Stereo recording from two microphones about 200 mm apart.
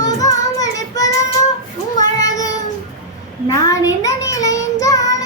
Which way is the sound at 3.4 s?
15° left (ahead or behind).